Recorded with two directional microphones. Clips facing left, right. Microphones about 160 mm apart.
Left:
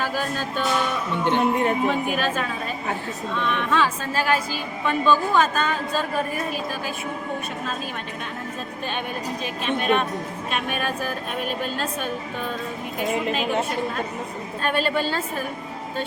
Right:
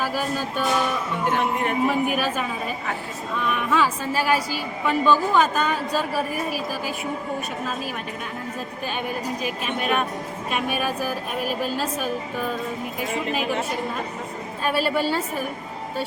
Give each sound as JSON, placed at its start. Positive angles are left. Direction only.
{"t": 0.0, "sound": "a woman's voice", "side_deg": -10}
{"t": 1.2, "sound": "speech", "side_deg": 25}
{"t": 1.9, "sound": "a woman's voice", "side_deg": -10}
{"t": 9.4, "sound": "a woman's voice", "side_deg": -5}
{"t": 14.6, "sound": "a woman's voice", "side_deg": -5}